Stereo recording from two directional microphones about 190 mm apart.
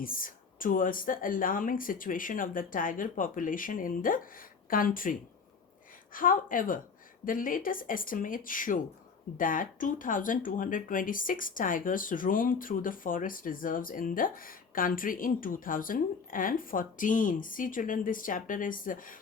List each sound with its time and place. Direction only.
0.0 s speech: 50° left (ahead or behind)
6.1 s speech: 45° left (ahead or behind)